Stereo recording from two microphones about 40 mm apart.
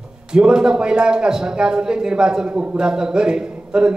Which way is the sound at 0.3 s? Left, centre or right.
Right.